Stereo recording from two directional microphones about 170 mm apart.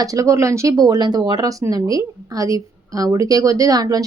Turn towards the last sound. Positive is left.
turn(degrees=-20)  # may be behind; listen again after turning